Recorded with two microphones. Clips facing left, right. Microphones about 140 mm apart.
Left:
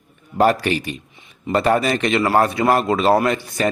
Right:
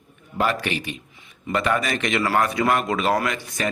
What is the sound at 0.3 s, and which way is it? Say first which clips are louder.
A man's voice: left 7 dB; 40° left (ahead or behind).